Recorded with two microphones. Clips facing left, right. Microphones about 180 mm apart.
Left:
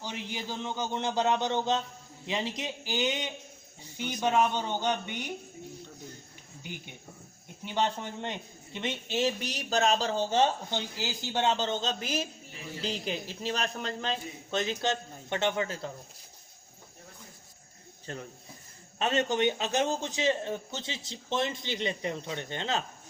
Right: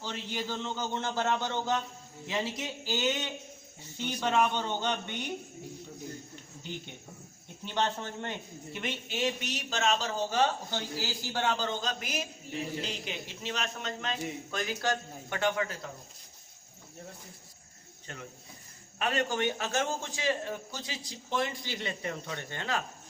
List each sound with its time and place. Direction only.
0.0 s speech: 15° left (ahead or behind)
6.6 s speech: 10° left (ahead or behind)
8.8 s speech: 30° left (ahead or behind)
10.7 s a man's voice: 20° left (ahead or behind)
18.9 s a man's voice: 25° left (ahead or behind)